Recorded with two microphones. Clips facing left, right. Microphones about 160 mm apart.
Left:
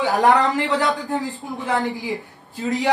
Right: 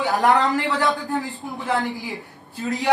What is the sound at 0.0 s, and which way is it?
A man's voice, 20° left (ahead or behind).